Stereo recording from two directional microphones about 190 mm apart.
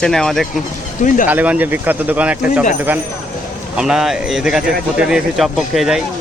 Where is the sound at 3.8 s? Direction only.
5° right (ahead or behind).